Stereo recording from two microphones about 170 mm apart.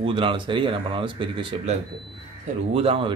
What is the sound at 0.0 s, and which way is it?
Speech, 30° right (ahead or behind).